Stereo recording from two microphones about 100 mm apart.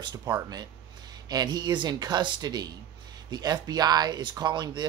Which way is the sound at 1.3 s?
40° right (ahead or behind).